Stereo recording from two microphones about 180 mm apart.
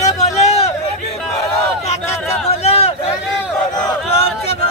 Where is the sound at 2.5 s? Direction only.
35° left (ahead or behind).